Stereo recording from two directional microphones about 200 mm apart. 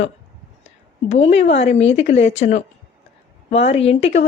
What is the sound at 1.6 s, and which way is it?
A woman's voice, 30° left (ahead or behind).